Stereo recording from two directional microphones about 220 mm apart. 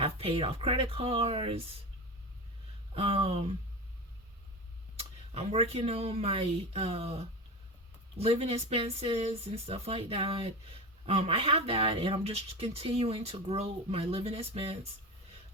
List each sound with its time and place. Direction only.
0.0 s speech: 25° right (ahead or behind)
2.9 s speech: 25° right (ahead or behind)
4.9 s speech: 30° right (ahead or behind)